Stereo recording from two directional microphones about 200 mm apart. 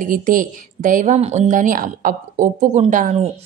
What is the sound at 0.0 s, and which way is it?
A woman's voice, 45° right (ahead or behind).